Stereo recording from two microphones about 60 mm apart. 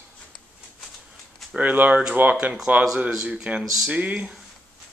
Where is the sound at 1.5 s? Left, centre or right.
Right.